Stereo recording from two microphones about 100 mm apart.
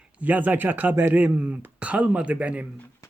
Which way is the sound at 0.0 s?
15° right (ahead or behind).